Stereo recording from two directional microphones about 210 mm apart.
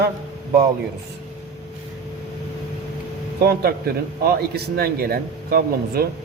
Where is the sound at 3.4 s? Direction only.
50° right (ahead or behind).